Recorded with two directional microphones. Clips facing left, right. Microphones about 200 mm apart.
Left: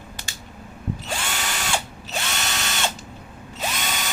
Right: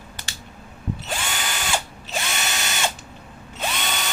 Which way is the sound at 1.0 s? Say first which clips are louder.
Even; centre (ahead or behind).